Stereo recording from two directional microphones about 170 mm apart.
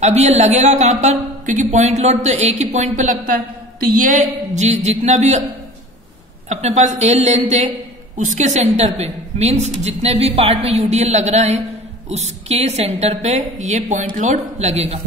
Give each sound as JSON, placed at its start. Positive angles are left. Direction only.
{"t": 0.0, "sound": "a woman's voice", "side_deg": -40}
{"t": 6.5, "sound": "a woman's voice", "side_deg": -45}